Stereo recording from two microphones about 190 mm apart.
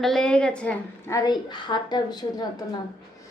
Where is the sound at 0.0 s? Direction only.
Centre (ahead or behind); by 2.5 s 20° left (ahead or behind).